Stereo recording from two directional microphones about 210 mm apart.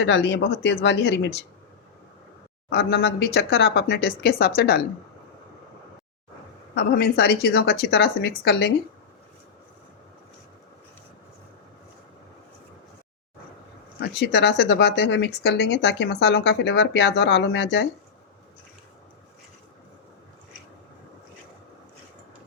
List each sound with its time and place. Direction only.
0.0 s speech: 55° left (ahead or behind)
2.6 s speech: 50° left (ahead or behind)
6.7 s speech: 50° left (ahead or behind)
14.1 s speech: 55° left (ahead or behind)